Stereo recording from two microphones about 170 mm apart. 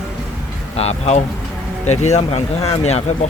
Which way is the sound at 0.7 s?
40° left (ahead or behind).